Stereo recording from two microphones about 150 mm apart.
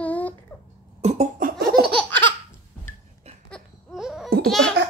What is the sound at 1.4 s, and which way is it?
Laughter, 90° right.